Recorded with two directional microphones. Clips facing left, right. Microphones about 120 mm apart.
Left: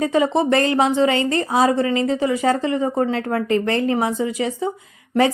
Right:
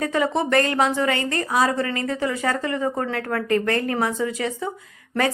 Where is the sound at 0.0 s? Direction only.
20° left (ahead or behind).